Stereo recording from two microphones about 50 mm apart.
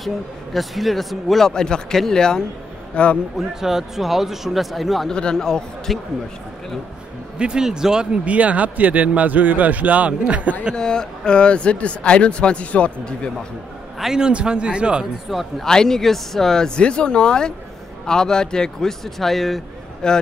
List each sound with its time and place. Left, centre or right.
0.0 s speech: centre
1.5 s speech: centre
3.3 s speech: centre
5.1 s speech: centre
7.3 s a man's voice: centre
8.4 s speech: right
10.8 s speech: centre
13.9 s a man's voice: centre
15.3 s speech: centre
15.6 s speech: centre
20.0 s speech: centre